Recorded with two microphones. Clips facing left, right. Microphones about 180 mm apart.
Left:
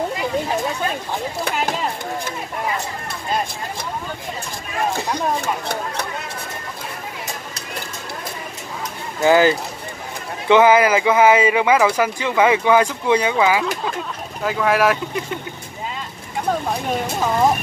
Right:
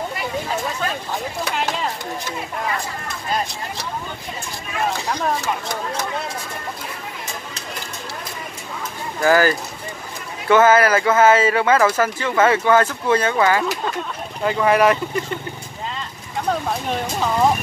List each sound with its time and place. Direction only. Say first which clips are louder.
5.4 s speech: left 1 dB; 60° left (ahead or behind)
9.2 s speech: left 2 dB; 20° left (ahead or behind); by 15.3 s 5° left (ahead or behind)
16.3 s speech: left 1 dB; 5° left (ahead or behind)